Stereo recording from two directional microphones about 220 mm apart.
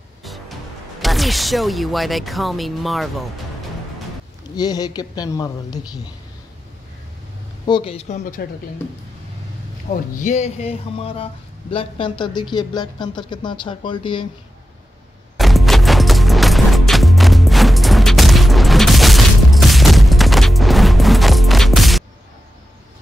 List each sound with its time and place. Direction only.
0.2 s music: centre (ahead or behind)
1.0 s speech: centre (ahead or behind)
4.6 s a woman's voice: 15° left (ahead or behind)
7.6 s speech: 25° left (ahead or behind)
10.2 s speech: 30° left (ahead or behind)
15.3 s music: centre (ahead or behind)